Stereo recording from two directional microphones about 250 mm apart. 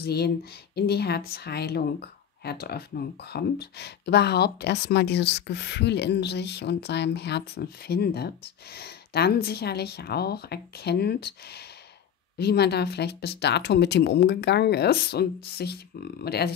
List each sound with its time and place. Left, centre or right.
0.0 s speech: left